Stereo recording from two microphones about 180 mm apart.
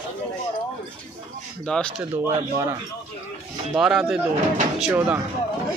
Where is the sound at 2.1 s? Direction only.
15° right (ahead or behind).